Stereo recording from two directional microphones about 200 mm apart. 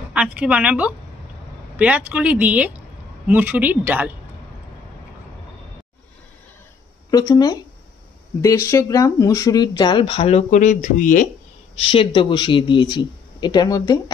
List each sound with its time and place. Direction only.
0.1 s speech: 5° right (ahead or behind)
7.1 s speech: 20° left (ahead or behind); by 11.2 s 40° left (ahead or behind)
11.8 s speech: 25° left (ahead or behind)